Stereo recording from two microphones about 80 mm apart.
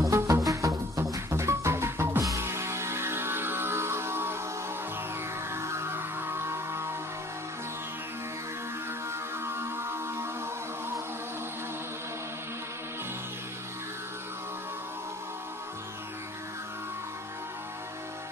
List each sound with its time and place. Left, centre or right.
0.0 s music: right
5.5 s music: right
9.4 s music: right